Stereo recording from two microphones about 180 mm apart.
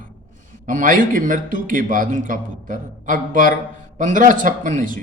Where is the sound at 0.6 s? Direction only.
45° right (ahead or behind).